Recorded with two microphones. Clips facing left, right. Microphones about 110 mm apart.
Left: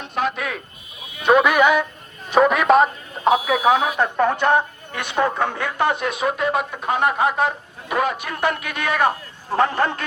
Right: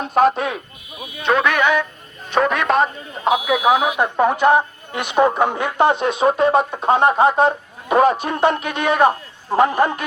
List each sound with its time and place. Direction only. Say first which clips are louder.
0.0 s speech: right 8 dB; 40° right (ahead or behind)
1.2 s speech: left 2 dB; 10° left (ahead or behind)
3.2 s speech: even; 10° right (ahead or behind)